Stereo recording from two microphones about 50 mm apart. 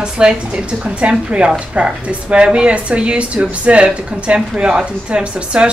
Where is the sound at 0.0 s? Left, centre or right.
Centre.